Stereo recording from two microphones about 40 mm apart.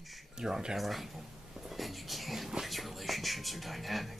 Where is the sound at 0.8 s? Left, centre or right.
Centre.